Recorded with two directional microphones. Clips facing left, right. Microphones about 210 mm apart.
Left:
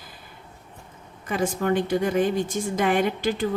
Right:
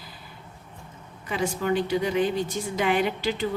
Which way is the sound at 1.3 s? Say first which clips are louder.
Left 2 dB; 45° left (ahead or behind).